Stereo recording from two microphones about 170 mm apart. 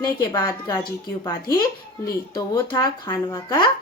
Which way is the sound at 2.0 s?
25° left (ahead or behind).